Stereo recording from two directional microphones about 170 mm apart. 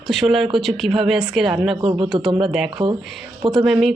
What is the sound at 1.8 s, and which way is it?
Speech, 35° right (ahead or behind).